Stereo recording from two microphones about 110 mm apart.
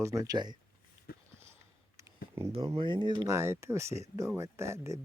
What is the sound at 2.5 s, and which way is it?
Speech, 60° right (ahead or behind).